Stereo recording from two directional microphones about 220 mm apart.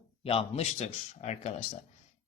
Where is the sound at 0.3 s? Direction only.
25° left (ahead or behind).